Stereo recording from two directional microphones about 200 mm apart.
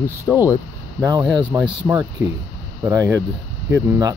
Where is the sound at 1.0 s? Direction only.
20° right (ahead or behind).